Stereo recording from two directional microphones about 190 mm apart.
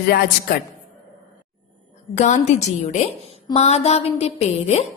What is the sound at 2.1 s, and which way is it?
A woman's voice, 40° left (ahead or behind).